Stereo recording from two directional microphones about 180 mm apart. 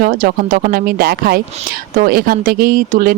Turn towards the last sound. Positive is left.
turn(degrees=-50)  # may be behind; listen again after turning